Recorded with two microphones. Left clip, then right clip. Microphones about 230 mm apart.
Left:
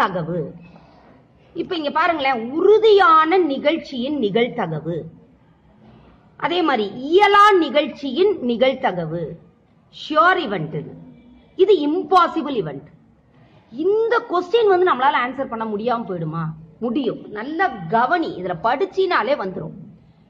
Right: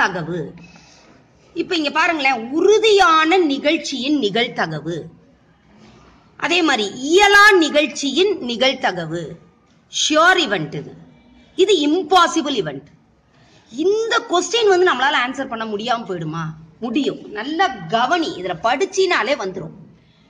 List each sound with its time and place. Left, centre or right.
0.0 s a woman's voice: right
1.5 s a woman's voice: right
6.3 s a woman's voice: right
13.7 s a woman's voice: right